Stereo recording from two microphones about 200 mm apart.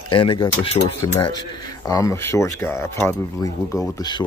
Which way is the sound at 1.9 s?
15° left (ahead or behind).